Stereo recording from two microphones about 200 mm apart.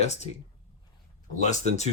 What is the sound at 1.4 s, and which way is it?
Speech, 35° left (ahead or behind).